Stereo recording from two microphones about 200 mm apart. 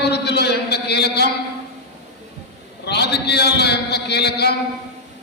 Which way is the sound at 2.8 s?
55° left (ahead or behind).